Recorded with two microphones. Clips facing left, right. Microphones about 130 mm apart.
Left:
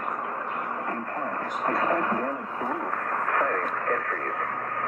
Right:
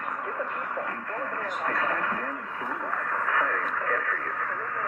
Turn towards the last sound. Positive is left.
turn(degrees=40)  # may be behind; listen again after turning